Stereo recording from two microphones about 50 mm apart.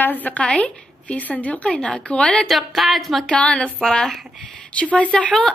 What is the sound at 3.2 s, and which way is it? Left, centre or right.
A woman's voice, left.